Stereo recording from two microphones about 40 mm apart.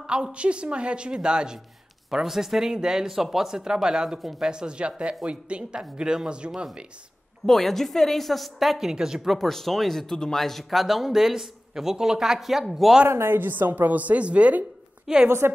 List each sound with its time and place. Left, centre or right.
0.0 s speech: right
2.0 s speech: centre
3.1 s speech: centre
7.4 s a woman's voice: centre
9.3 s a woman's voice: centre
13.1 s speech: right
13.4 s a woman's voice: right
15.2 s a woman's voice: right